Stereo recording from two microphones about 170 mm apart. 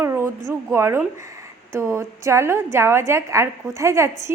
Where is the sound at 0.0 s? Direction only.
15° right (ahead or behind).